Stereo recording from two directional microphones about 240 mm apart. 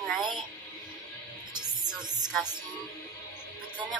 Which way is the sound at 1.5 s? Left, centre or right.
Centre.